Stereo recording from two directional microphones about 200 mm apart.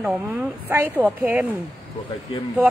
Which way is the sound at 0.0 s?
5° right (ahead or behind).